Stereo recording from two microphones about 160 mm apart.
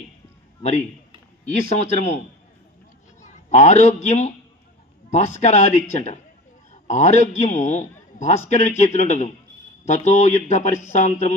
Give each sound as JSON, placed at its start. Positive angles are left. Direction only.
{"t": 0.6, "sound": "a man's voice", "side_deg": 45}
{"t": 3.2, "sound": "a man's voice", "side_deg": 45}